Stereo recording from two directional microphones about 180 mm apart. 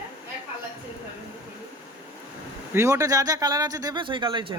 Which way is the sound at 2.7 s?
15° right (ahead or behind).